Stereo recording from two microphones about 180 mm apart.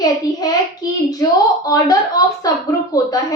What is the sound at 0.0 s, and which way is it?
A child's voice, 20° left (ahead or behind).